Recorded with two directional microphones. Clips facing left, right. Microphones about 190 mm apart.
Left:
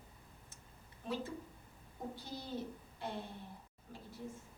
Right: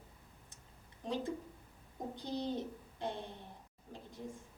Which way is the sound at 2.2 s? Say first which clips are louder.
Right 8 dB; 20° right (ahead or behind).